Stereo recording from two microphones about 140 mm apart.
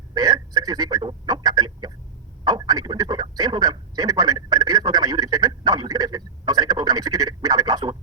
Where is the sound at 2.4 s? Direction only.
30° right (ahead or behind).